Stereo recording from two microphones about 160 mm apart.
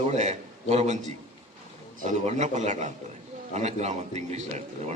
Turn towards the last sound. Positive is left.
turn(degrees=-45)  # may be behind; listen again after turning